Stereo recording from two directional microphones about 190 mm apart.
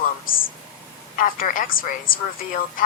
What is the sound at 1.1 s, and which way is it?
Speech, 45° left (ahead or behind).